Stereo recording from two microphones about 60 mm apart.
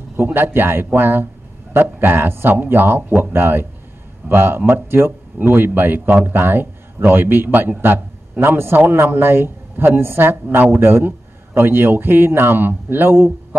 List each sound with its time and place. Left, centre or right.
0.2 s a man's voice: right